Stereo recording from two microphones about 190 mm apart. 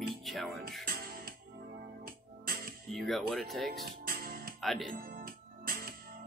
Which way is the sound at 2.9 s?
Centre (ahead or behind).